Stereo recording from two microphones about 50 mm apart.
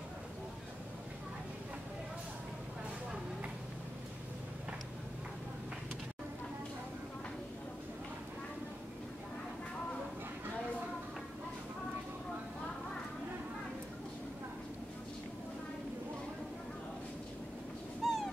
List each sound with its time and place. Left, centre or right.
18.0 s dog: centre